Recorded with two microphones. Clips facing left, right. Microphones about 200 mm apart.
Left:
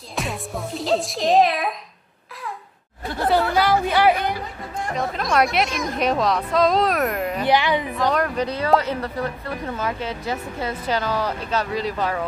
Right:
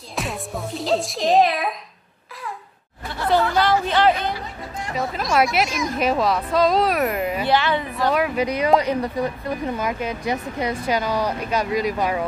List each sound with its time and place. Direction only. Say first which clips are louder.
0.1 s speech: even; centre (ahead or behind)
3.5 s speech: even; 10° left (ahead or behind)
4.9 s speech: right 1 dB; 5° right (ahead or behind)
7.4 s speech: left 2 dB; 15° left (ahead or behind)
8.0 s speech: right 4 dB; 5° right (ahead or behind)